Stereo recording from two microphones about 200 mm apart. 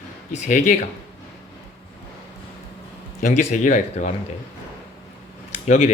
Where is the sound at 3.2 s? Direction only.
35° left (ahead or behind).